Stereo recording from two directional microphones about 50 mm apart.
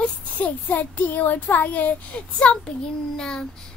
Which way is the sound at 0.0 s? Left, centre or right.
Left.